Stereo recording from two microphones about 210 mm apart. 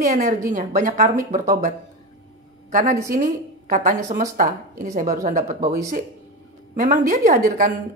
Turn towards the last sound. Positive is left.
turn(degrees=-40)  # may be behind; listen again after turning